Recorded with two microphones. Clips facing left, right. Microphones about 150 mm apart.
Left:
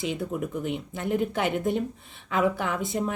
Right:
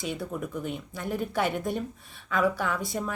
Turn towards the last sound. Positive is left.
turn(degrees=20)  # may be behind; listen again after turning